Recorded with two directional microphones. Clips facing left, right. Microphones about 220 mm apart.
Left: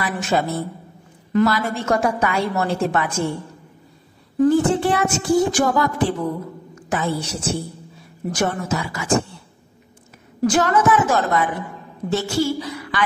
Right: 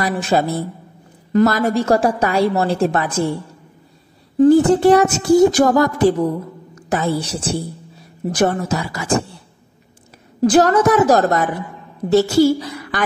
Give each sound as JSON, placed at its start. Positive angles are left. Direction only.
{"t": 0.1, "sound": "child singing", "side_deg": -35}
{"t": 4.4, "sound": "child singing", "side_deg": -35}
{"t": 6.7, "sound": "a woman's voice", "side_deg": -40}
{"t": 8.3, "sound": "child singing", "side_deg": -35}
{"t": 10.4, "sound": "child singing", "side_deg": -35}